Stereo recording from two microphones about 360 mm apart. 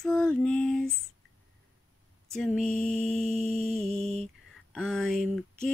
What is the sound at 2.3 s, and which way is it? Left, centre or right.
Mantra, centre.